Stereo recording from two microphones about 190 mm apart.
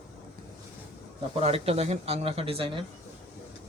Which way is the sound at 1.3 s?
30° right (ahead or behind).